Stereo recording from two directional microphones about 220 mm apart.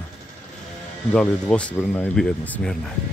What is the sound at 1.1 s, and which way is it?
Speech, 5° left (ahead or behind).